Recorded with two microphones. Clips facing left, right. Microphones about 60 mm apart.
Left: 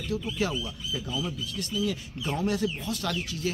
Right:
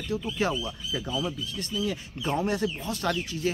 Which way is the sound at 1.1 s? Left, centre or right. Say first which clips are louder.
Right 1 dB; centre.